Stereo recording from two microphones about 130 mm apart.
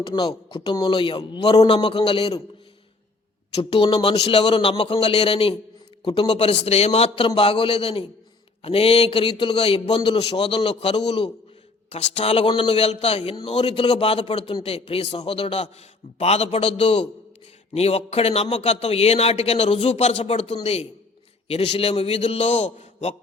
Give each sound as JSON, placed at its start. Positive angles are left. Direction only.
{"t": 0.2, "sound": "a man's voice", "side_deg": 35}
{"t": 3.5, "sound": "a man's voice", "side_deg": 45}
{"t": 11.9, "sound": "a man's voice", "side_deg": 55}
{"t": 16.1, "sound": "a man's voice", "side_deg": 55}